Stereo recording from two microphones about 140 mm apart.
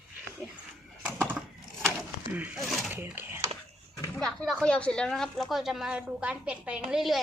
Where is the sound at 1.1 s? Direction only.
15° right (ahead or behind).